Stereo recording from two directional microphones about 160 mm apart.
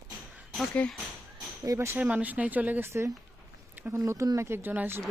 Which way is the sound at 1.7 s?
15° right (ahead or behind).